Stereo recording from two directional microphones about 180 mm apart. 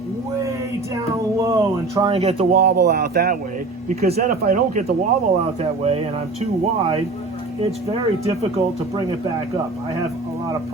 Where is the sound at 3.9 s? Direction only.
35° right (ahead or behind).